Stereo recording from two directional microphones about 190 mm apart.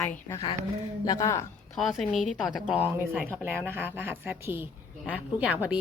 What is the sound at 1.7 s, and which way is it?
A woman's voice, centre (ahead or behind).